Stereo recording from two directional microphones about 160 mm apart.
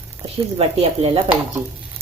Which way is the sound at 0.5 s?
40° right (ahead or behind).